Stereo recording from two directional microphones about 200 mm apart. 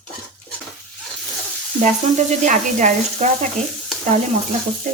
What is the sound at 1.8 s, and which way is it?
Frying, 40° right (ahead or behind).